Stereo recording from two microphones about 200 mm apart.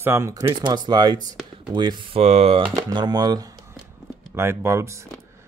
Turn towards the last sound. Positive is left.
turn(degrees=-15)  # may be behind; listen again after turning